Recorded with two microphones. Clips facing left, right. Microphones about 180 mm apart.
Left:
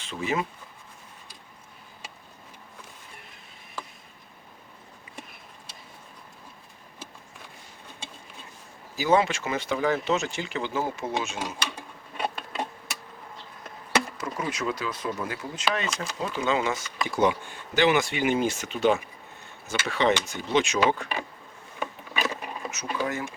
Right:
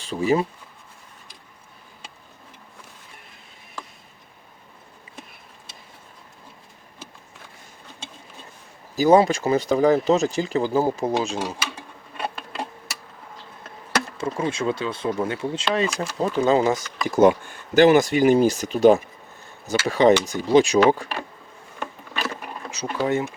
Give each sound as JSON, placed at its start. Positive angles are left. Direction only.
{"t": 0.0, "sound": "speech", "side_deg": -35}
{"t": 9.0, "sound": "speech", "side_deg": -40}
{"t": 11.6, "sound": "a sound", "side_deg": -5}
{"t": 14.2, "sound": "speech", "side_deg": -25}
{"t": 16.2, "sound": "speech", "side_deg": -40}
{"t": 22.7, "sound": "speech", "side_deg": -30}